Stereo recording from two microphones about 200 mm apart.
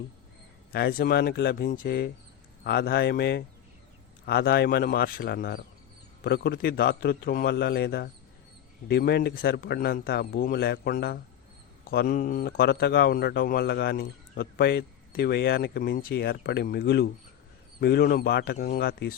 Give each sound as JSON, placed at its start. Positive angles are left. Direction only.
{"t": 0.7, "sound": "speech", "side_deg": 50}